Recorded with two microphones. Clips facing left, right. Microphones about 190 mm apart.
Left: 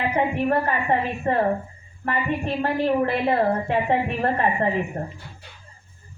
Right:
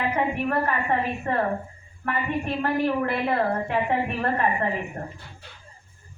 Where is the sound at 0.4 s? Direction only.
30° left (ahead or behind).